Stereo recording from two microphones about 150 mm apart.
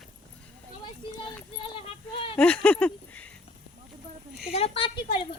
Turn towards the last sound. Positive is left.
turn(degrees=40)  # may be behind; listen again after turning